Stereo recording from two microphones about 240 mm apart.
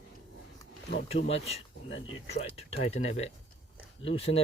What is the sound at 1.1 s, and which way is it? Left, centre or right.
Speech, left.